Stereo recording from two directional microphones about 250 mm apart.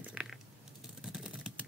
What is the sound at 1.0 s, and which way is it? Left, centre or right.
Typing, centre.